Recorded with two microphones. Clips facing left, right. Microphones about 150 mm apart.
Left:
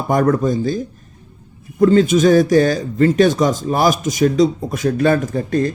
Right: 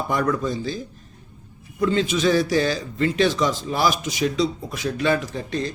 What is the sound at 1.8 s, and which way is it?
A man's voice, 45° left (ahead or behind).